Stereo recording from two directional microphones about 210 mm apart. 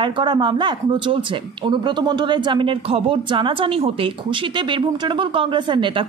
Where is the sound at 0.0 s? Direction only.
20° right (ahead or behind).